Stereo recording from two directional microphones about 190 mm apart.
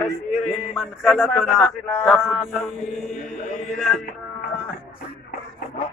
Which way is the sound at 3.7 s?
Centre (ahead or behind).